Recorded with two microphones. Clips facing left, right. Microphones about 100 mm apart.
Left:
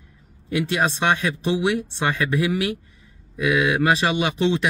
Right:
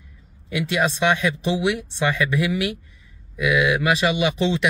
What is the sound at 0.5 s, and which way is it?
Speech, 40° left (ahead or behind).